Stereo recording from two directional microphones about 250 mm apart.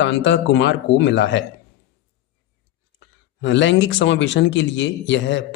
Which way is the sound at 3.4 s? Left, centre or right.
Left.